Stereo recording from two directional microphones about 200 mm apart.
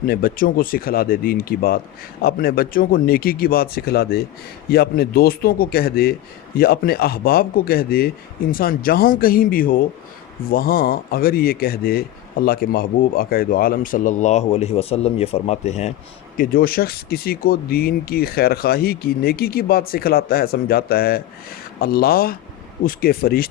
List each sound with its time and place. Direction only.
0.0 s speech: 45° left (ahead or behind)
16.4 s speech: 45° left (ahead or behind)